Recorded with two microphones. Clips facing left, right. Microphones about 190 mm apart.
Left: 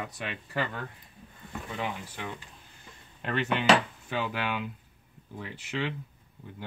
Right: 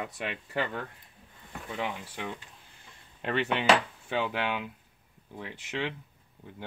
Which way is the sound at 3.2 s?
25° right (ahead or behind).